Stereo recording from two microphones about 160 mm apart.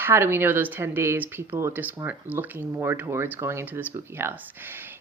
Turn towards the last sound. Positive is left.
turn(degrees=-15)  # may be behind; listen again after turning